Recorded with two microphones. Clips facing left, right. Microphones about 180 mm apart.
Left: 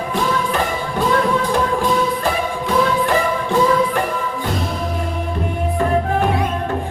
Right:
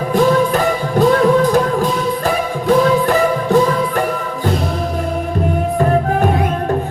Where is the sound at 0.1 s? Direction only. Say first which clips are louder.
Right 8 dB; 40° right (ahead or behind).